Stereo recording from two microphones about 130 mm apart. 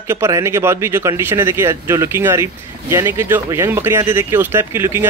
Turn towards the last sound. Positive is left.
turn(degrees=-20)  # may be behind; listen again after turning